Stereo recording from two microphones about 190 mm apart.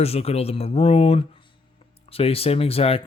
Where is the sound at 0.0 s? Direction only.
30° left (ahead or behind).